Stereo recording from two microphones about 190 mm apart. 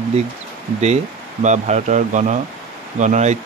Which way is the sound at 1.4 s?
40° right (ahead or behind).